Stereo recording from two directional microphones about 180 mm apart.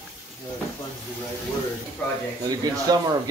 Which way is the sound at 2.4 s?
20° right (ahead or behind).